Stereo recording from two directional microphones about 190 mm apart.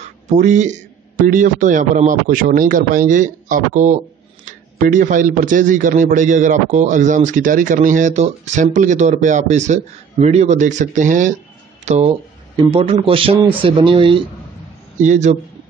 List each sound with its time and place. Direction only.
0.0 s a man's voice: 40° right (ahead or behind)
15.0 s a man's voice: 40° right (ahead or behind)